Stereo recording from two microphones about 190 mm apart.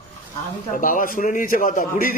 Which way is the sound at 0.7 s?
45° left (ahead or behind).